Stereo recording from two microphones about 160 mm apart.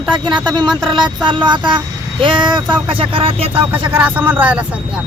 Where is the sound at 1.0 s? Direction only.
30° right (ahead or behind).